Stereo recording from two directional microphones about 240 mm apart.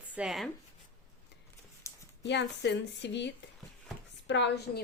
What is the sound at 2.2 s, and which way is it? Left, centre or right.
A woman's voice, left.